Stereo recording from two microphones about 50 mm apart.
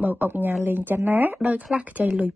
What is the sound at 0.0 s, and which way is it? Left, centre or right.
Speech, right.